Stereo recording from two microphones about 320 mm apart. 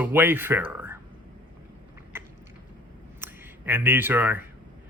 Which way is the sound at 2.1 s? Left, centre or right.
Centre.